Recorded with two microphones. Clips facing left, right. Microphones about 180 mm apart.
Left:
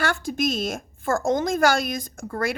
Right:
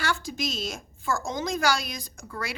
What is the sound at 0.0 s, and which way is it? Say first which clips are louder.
A woman's voice: left 6 dB; 55° left (ahead or behind).